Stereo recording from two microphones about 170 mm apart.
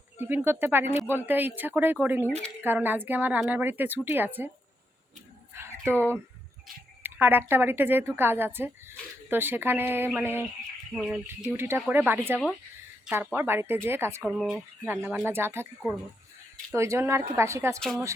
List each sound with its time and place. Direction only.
0.3 s a woman's voice: 10° right (ahead or behind)
5.5 s a sound: 15° right (ahead or behind)
7.0 s a woman's voice: 10° right (ahead or behind)
10.9 s bird: 5° right (ahead or behind)
11.5 s a woman's voice: 15° right (ahead or behind)
14.2 s a woman's voice: centre (ahead or behind); by 15.6 s 15° right (ahead or behind)
16.7 s a woman's voice: 15° right (ahead or behind)
17.7 s bird: centre (ahead or behind)